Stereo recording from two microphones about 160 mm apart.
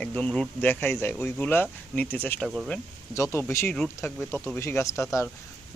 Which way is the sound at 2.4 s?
5° right (ahead or behind).